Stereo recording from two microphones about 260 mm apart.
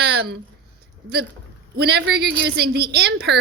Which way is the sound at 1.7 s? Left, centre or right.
Right.